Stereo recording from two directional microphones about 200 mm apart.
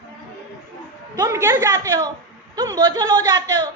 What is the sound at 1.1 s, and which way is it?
A woman's voice, 15° right (ahead or behind).